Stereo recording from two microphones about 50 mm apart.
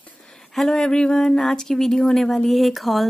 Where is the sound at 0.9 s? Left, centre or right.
Centre.